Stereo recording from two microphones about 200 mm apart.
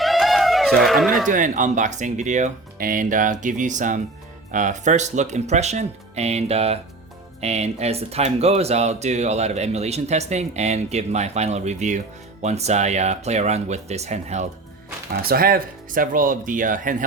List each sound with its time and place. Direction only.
0.0 s a sound: centre (ahead or behind)
1.3 s speech: 40° right (ahead or behind)
15.1 s speech: 50° right (ahead or behind)